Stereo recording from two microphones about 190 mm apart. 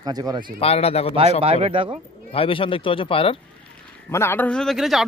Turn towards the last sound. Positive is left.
turn(degrees=0)  # may be behind; listen again after turning